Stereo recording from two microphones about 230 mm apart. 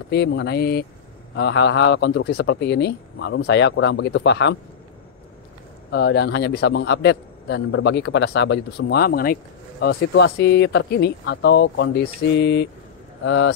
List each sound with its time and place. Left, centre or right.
0.1 s a man's voice: left
5.9 s a man's voice: left